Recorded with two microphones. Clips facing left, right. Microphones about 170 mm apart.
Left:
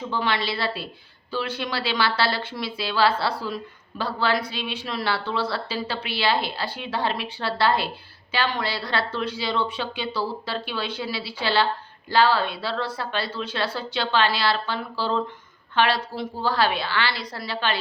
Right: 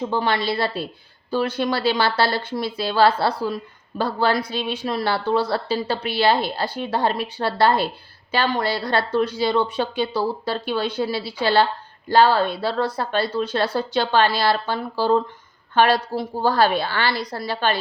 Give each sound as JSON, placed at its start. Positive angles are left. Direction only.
{"t": 0.1, "sound": "a woman's voice", "side_deg": -45}